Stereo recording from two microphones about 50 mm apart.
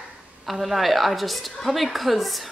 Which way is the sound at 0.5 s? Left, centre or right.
Centre.